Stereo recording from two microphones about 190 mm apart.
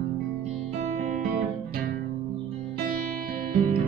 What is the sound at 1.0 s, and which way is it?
Music, 45° right (ahead or behind).